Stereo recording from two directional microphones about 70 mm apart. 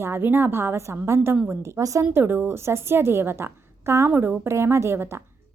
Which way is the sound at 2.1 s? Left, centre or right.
Right.